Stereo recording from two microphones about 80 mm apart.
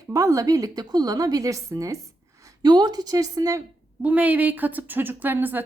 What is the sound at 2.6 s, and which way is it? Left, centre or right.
Speech, right.